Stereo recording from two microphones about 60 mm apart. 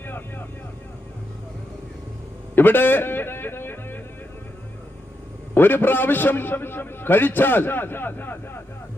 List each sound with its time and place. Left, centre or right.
0.0 s vehicle: left
2.6 s a sound: left
5.5 s a man's voice: left